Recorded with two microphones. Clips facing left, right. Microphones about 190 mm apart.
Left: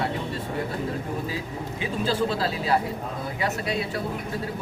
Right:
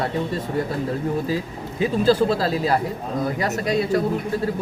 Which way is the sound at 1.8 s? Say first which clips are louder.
Right 8 dB; 40° right (ahead or behind).